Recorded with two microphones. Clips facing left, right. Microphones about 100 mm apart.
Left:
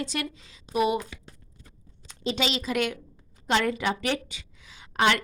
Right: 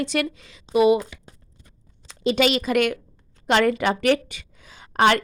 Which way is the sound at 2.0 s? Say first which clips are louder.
Right 8 dB; 65° right (ahead or behind).